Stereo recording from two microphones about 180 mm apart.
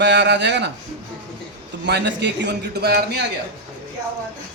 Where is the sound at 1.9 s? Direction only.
70° right (ahead or behind).